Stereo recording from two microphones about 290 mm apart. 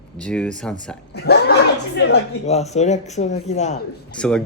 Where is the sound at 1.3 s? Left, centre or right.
Left.